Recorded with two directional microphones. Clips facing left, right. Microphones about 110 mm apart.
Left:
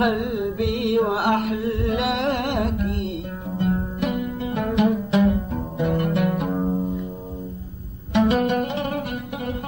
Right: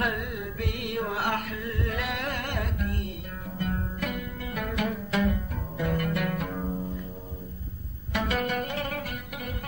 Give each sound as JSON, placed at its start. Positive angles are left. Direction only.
{"t": 0.0, "sound": "music", "side_deg": 25}
{"t": 8.1, "sound": "music", "side_deg": 25}